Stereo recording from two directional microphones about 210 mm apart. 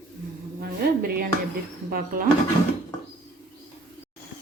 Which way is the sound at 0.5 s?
45° right (ahead or behind).